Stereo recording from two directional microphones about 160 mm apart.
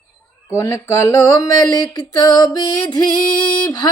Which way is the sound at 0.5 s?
20° left (ahead or behind).